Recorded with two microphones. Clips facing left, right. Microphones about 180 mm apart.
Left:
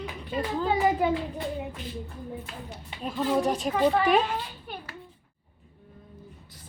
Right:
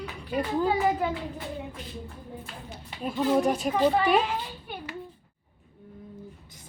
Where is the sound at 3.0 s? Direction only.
5° right (ahead or behind).